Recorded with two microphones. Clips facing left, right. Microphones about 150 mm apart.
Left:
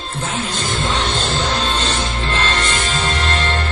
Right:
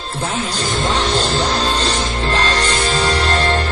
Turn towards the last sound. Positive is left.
turn(degrees=-35)  # may be behind; listen again after turning